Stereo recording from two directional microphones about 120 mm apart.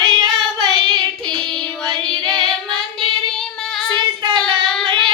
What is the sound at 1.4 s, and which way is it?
Child singing, 5° left (ahead or behind).